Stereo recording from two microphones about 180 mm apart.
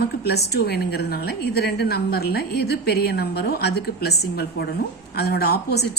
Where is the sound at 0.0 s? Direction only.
65° left (ahead or behind).